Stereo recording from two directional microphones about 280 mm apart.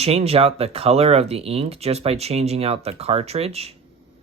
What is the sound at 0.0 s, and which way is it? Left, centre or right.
Speech, right.